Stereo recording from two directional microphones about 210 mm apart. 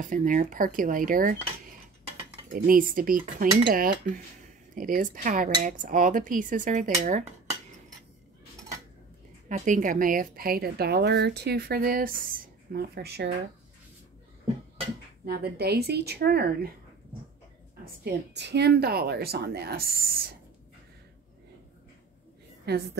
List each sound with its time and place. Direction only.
0.0 s speech: 40° right (ahead or behind)
2.5 s a woman's voice: 45° right (ahead or behind)
9.5 s a woman's voice: 40° right (ahead or behind)
15.2 s a woman's voice: 45° right (ahead or behind)
18.0 s a woman's voice: 55° right (ahead or behind)
22.7 s a woman's voice: 55° right (ahead or behind)